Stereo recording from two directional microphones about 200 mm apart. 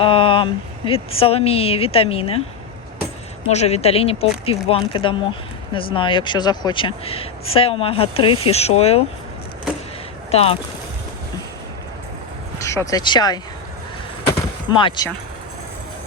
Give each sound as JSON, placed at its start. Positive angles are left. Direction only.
{"t": 0.0, "sound": "a sound", "side_deg": 25}
{"t": 0.9, "sound": "speech", "side_deg": 30}
{"t": 3.5, "sound": "speech", "side_deg": 35}
{"t": 10.3, "sound": "speech", "side_deg": 30}
{"t": 12.6, "sound": "speech", "side_deg": 15}
{"t": 14.8, "sound": "speech", "side_deg": 20}